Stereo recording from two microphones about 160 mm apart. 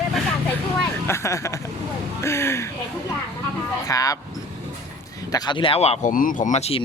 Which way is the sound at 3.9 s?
20° left (ahead or behind).